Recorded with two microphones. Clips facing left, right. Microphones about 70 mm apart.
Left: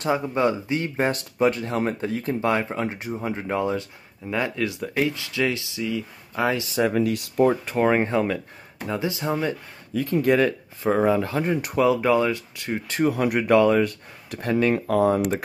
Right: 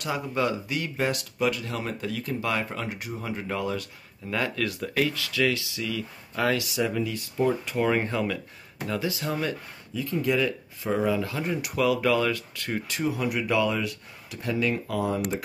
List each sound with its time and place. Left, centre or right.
0.0 s speech: left
6.6 s speech: left
7.0 s speech: left
7.6 s speech: left
9.9 s speech: left; by 12.8 s centre
12.8 s speech: left